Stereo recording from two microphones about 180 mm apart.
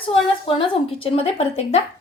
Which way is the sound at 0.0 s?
30° left (ahead or behind).